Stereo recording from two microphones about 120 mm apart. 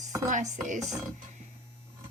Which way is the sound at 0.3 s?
90° right.